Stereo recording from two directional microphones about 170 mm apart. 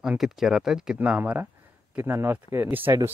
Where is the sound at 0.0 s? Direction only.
Centre (ahead or behind).